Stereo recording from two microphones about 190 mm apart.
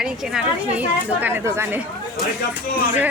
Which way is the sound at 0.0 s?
5° right (ahead or behind).